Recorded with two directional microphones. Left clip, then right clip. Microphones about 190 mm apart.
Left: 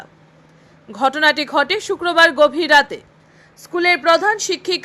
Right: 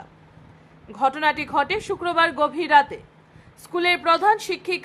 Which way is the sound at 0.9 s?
15° left (ahead or behind).